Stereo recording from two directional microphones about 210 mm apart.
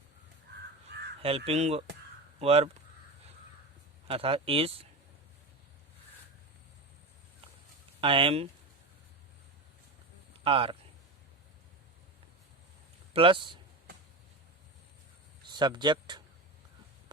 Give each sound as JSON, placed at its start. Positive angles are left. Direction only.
{"t": 0.9, "sound": "crow", "side_deg": -50}
{"t": 1.5, "sound": "speech", "side_deg": -30}
{"t": 4.1, "sound": "speech", "side_deg": -25}
{"t": 8.0, "sound": "speech", "side_deg": -25}
{"t": 10.4, "sound": "speech", "side_deg": -25}
{"t": 13.1, "sound": "speech", "side_deg": -25}
{"t": 15.4, "sound": "speech", "side_deg": -20}